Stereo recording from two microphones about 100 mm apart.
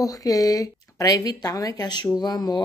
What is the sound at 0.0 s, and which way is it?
A woman's voice, 35° left (ahead or behind).